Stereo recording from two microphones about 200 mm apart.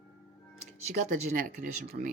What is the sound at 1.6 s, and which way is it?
Speech, 45° right (ahead or behind).